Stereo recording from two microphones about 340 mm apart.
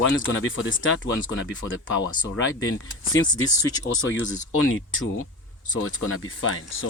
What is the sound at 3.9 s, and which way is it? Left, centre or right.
Speech, left.